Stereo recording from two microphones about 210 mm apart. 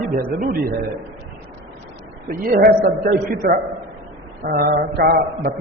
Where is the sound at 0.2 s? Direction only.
45° right (ahead or behind).